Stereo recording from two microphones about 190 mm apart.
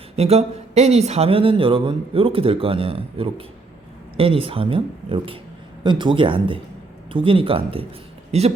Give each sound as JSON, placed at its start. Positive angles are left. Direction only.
{"t": 0.2, "sound": "speech", "side_deg": -35}